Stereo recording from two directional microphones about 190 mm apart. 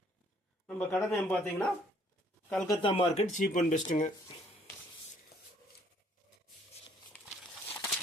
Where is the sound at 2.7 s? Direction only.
30° left (ahead or behind).